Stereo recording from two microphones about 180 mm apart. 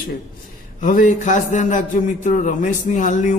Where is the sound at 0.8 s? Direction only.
45° left (ahead or behind).